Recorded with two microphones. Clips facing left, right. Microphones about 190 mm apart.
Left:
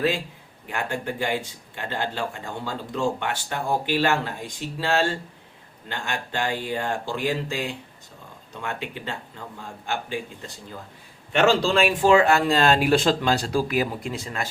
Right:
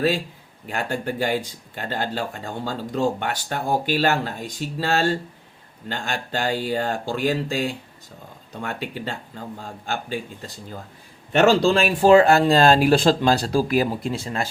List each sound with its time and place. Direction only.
0.7 s speech: 40° right (ahead or behind)
6.3 s speech: 35° right (ahead or behind)